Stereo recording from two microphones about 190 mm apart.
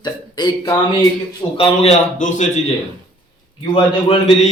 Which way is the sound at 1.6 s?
35° left (ahead or behind).